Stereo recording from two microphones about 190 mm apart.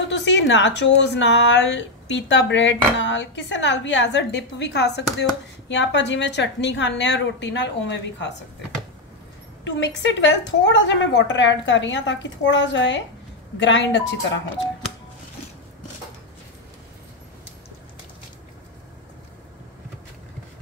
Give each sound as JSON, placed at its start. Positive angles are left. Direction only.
{"t": 0.1, "sound": "a woman's voice", "side_deg": 70}
{"t": 9.7, "sound": "a woman's voice", "side_deg": 75}